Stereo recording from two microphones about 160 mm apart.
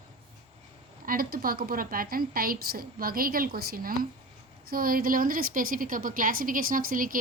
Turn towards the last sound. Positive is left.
turn(degrees=-60)  # may be behind; listen again after turning